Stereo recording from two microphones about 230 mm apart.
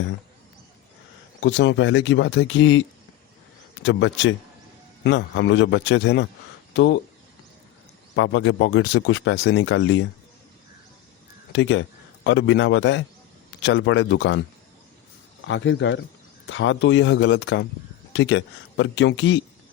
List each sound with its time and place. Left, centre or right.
1.4 s speech: left
3.8 s a man's voice: left
8.1 s speech: left
11.5 s a man's voice: left
15.4 s a man's voice: left